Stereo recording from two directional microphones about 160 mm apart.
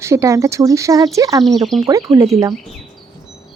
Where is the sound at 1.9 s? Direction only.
20° right (ahead or behind).